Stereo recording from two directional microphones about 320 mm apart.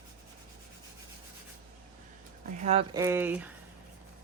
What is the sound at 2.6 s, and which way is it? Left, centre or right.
Speech, centre.